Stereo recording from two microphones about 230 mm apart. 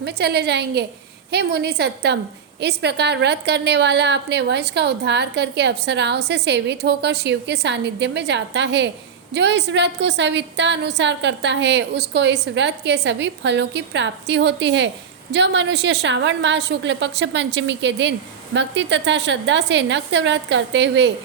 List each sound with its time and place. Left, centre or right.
0.0 s a woman's voice: right